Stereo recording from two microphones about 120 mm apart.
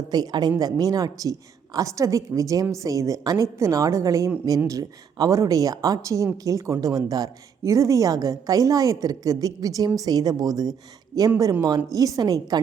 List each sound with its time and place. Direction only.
0.1 s speech: 35° right (ahead or behind)